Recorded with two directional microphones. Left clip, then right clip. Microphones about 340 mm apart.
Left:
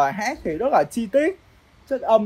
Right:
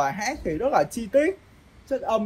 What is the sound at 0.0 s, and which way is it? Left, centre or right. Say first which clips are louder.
Speech: left 4 dB; left.